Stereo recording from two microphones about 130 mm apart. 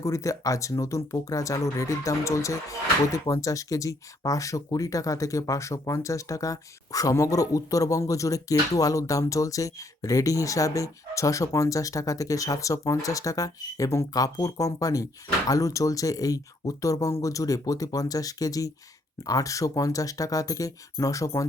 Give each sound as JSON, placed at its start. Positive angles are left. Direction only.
{"t": 0.0, "sound": "speech", "side_deg": 25}